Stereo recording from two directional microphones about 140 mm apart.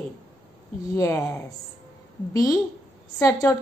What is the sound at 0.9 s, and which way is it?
A woman's voice, 20° left (ahead or behind).